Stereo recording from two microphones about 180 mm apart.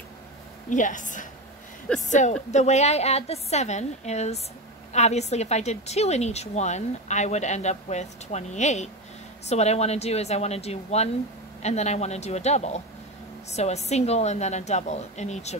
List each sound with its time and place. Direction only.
0.7 s a woman's voice: 45° left (ahead or behind)